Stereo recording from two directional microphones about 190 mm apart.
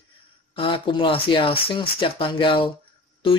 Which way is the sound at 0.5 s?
30° left (ahead or behind).